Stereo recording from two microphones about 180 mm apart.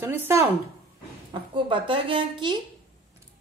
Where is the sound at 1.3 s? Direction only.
25° right (ahead or behind).